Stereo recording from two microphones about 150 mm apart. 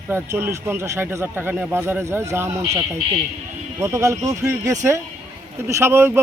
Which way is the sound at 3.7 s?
20° right (ahead or behind).